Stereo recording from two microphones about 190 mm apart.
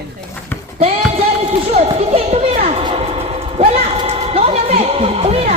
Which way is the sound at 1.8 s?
30° right (ahead or behind).